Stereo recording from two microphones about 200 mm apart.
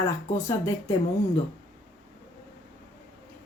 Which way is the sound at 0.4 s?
15° left (ahead or behind).